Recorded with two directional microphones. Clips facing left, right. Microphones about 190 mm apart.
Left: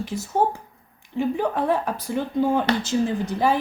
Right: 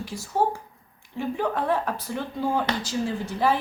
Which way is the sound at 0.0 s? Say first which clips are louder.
Left 6 dB; 20° left (ahead or behind).